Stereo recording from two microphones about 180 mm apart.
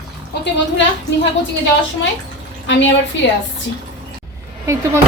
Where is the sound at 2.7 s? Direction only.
90° left.